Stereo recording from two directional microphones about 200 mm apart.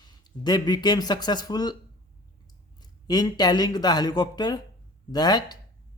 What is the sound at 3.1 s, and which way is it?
Speech, 20° left (ahead or behind).